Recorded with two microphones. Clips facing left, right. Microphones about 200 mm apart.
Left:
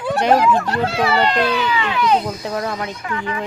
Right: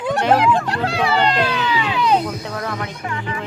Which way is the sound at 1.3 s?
10° right (ahead or behind).